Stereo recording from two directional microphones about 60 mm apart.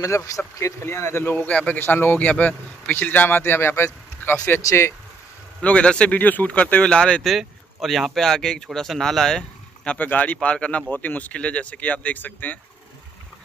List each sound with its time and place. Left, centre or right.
0.0 s speech: left
0.8 s speech: left
1.8 s speech: left
2.1 s speech: left
4.2 s speech: left
4.6 s speech: left
5.6 s speech: centre
6.1 s speech: left
7.2 s speech: centre
9.9 s speech: left